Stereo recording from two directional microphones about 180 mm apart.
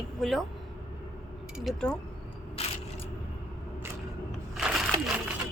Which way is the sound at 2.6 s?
35° left (ahead or behind).